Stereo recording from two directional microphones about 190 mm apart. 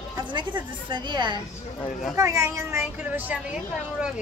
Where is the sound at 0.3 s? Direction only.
25° right (ahead or behind).